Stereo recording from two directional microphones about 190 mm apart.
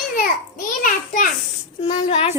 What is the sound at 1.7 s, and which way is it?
Speech, 30° left (ahead or behind).